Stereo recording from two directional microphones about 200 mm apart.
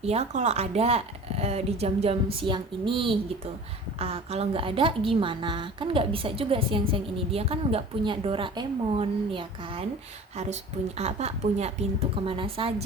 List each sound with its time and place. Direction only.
0.0 s a woman's voice: 30° right (ahead or behind)